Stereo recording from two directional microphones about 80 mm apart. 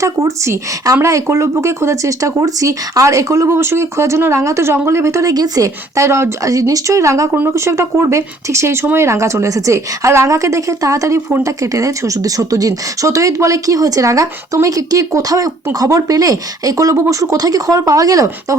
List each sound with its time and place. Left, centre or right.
0.0 s speech: right
5.3 s speech: right